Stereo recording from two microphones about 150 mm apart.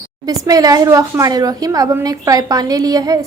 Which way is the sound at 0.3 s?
25° right (ahead or behind).